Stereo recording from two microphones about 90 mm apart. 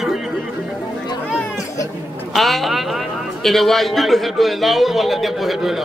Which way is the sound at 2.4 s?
Centre (ahead or behind).